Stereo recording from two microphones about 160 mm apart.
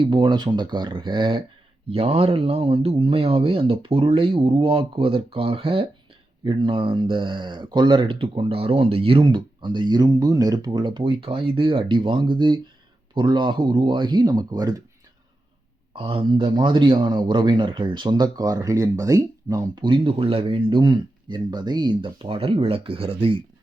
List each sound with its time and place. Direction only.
0.0 s speech: 30° right (ahead or behind)
15.9 s speech: 35° right (ahead or behind)